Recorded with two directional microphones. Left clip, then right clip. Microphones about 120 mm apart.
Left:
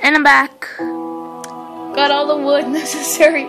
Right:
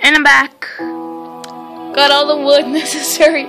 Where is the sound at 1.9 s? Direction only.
40° right (ahead or behind); by 3.4 s 20° right (ahead or behind).